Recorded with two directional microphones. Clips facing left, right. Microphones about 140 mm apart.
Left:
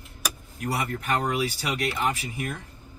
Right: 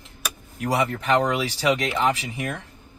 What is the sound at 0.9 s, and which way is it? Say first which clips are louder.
Speech: right 5 dB; 90° right.